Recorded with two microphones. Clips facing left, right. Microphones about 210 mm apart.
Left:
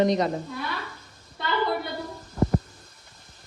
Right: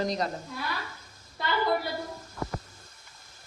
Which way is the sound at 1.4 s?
Centre (ahead or behind).